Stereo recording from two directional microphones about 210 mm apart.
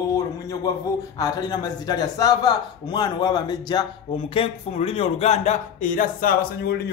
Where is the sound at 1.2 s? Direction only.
20° left (ahead or behind).